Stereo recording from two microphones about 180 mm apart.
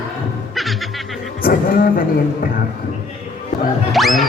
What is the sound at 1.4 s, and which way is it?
Speech, 55° left (ahead or behind).